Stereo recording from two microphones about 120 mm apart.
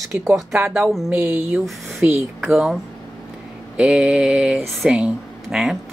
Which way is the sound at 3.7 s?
10° right (ahead or behind).